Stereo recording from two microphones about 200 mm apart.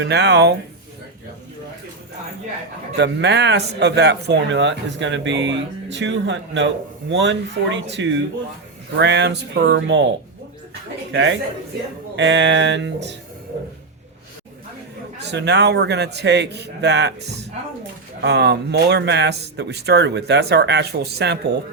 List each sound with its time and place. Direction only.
0.0 s speech: 60° right (ahead or behind)
2.9 s speech: 60° right (ahead or behind)
11.1 s a man's voice: 70° right (ahead or behind)
15.2 s speech: 60° right (ahead or behind)
18.2 s speech: 60° right (ahead or behind)